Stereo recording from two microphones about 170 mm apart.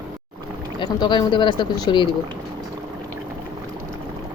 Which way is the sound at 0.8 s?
25° left (ahead or behind).